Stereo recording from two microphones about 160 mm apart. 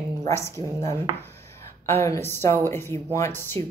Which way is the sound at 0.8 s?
15° left (ahead or behind).